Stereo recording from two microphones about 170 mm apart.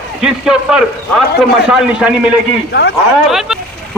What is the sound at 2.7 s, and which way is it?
Speech, 80° left.